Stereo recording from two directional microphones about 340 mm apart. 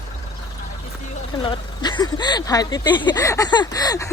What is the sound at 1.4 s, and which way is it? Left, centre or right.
Speech, centre.